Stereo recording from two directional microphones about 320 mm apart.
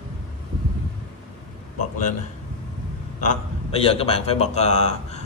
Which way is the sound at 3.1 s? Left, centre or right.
Left.